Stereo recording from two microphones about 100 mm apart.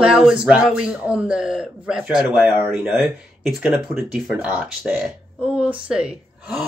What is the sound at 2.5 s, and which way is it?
Speech, 20° right (ahead or behind).